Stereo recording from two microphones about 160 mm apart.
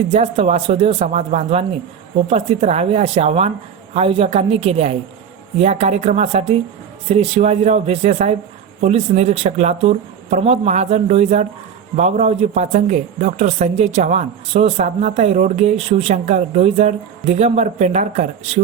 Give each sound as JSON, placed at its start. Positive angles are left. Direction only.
{"t": 0.1, "sound": "speech", "side_deg": -40}